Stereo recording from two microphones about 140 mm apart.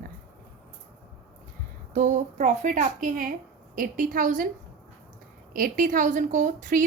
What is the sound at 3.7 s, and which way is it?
Speech, 80° right.